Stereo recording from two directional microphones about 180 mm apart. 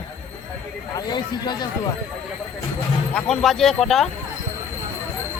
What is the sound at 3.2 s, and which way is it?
Speech, 5° left (ahead or behind).